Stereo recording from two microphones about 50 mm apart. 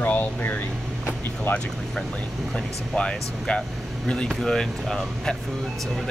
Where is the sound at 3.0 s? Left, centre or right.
Centre.